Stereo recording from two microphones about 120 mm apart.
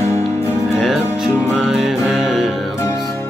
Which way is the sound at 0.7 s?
Centre (ahead or behind).